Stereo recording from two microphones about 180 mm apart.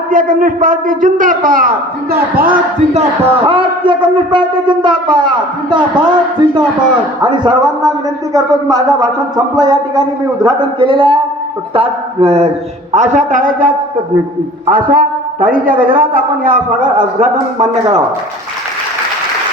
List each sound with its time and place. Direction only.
0.1 s a man's voice: 50° right (ahead or behind)
3.0 s shofar: 30° right (ahead or behind)
11.7 s a man's voice: 35° right (ahead or behind)